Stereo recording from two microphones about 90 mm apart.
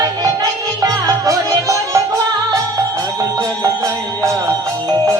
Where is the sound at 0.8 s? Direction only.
45° right (ahead or behind).